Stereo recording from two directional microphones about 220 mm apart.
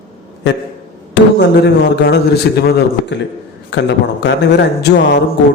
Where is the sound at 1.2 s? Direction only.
55° left (ahead or behind).